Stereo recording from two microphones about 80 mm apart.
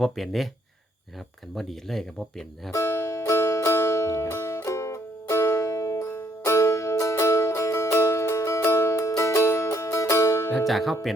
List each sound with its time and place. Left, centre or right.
0.0 s speech: centre
1.5 s speech: centre
2.7 s music: left
10.7 s speech: centre